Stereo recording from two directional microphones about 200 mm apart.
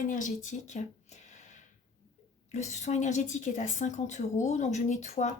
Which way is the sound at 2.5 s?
35° left (ahead or behind).